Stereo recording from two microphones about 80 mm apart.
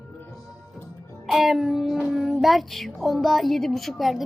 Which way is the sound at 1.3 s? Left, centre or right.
Centre.